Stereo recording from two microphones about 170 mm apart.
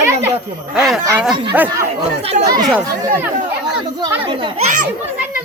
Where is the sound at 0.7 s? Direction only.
5° right (ahead or behind).